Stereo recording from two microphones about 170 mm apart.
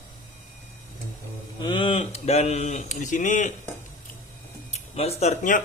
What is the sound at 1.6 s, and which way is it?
Speech, 30° left (ahead or behind).